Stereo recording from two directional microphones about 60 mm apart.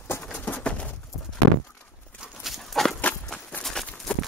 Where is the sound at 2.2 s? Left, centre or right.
Centre.